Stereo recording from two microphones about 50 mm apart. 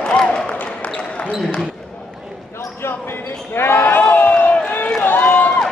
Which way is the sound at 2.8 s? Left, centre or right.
Left.